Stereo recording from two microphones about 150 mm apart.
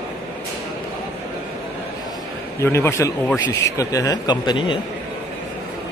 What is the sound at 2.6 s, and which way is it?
A man's voice, 15° left (ahead or behind).